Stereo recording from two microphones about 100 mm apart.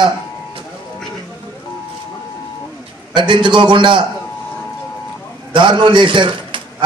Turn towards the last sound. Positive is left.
turn(degrees=-55)  # may be behind; listen again after turning